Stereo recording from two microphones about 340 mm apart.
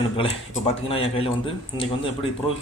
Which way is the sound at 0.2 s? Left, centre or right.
Centre.